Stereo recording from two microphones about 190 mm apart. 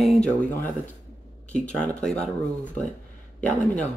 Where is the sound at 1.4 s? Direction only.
5° left (ahead or behind).